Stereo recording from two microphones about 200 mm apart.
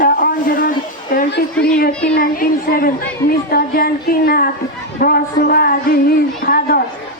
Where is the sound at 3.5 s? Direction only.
50° left (ahead or behind).